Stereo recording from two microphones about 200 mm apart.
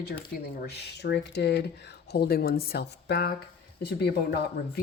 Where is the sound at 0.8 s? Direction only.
55° left (ahead or behind).